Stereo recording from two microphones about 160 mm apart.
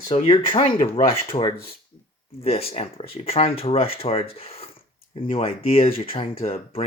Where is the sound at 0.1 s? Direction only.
35° left (ahead or behind).